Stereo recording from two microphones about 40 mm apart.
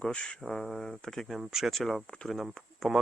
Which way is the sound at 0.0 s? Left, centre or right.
Left.